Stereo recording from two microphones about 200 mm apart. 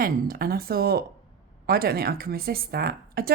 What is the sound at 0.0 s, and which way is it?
A woman's voice, 45° right (ahead or behind).